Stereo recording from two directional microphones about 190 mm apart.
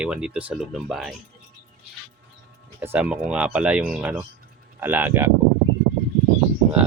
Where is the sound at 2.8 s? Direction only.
10° right (ahead or behind).